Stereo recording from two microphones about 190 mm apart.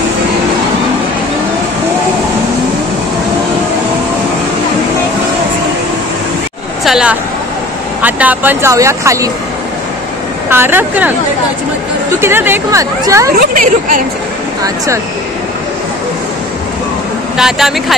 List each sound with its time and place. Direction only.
6.8 s speech: 5° right (ahead or behind)
10.5 s speech: 10° right (ahead or behind)
12.2 s speech: 10° right (ahead or behind)
13.4 s a woman's voice: 45° right (ahead or behind)
17.4 s speech: centre (ahead or behind)